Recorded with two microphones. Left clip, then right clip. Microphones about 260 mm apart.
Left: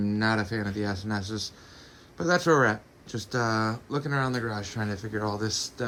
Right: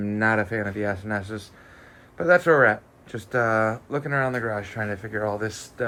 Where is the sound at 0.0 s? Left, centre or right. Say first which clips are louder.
Right 5 dB; centre.